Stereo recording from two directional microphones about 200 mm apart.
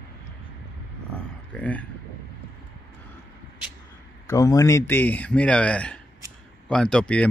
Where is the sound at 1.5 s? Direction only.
5° left (ahead or behind).